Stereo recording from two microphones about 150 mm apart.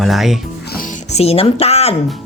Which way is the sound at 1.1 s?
40° left (ahead or behind).